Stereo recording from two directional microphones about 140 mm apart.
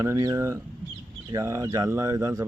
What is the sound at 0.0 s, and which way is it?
Speech, 25° right (ahead or behind).